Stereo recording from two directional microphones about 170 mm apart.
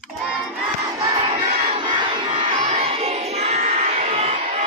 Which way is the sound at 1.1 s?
30° right (ahead or behind).